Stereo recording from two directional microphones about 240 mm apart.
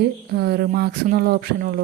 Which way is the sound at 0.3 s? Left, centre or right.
Right.